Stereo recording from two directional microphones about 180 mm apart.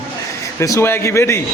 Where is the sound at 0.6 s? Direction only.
15° left (ahead or behind).